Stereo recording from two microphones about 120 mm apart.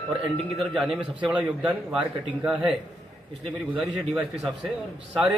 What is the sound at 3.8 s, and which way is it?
Speech, centre (ahead or behind).